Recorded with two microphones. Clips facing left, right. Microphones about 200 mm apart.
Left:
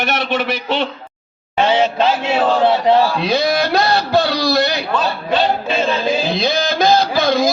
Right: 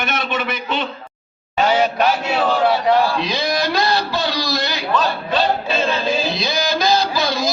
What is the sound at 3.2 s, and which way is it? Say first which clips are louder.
A man's voice: left 4 dB; 55° left (ahead or behind).